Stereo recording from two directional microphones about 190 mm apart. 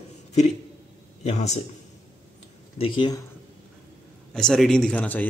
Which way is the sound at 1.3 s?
35° left (ahead or behind).